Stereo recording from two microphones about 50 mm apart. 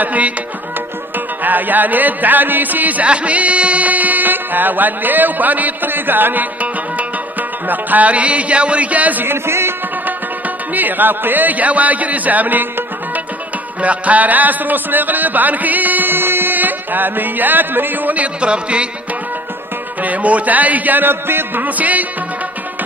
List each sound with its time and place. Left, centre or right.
0.0 s speech: right
1.4 s music: right
9.2 s speech: right
10.7 s a man's voice: right
20.0 s music: right
21.6 s music: right